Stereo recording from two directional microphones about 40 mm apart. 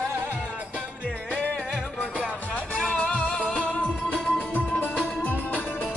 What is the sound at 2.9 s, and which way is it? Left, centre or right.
Music, left.